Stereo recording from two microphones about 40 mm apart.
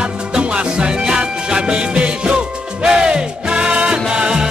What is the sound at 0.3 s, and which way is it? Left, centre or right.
Music, right.